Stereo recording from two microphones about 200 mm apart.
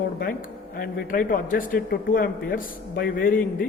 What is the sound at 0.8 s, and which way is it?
Speech, 45° left (ahead or behind).